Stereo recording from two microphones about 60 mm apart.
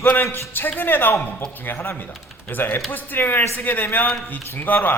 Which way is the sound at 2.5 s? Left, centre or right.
Left.